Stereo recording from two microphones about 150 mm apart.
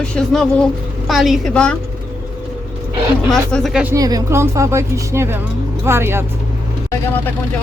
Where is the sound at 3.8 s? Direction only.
25° right (ahead or behind).